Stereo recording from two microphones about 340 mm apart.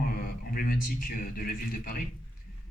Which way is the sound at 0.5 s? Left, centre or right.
Left.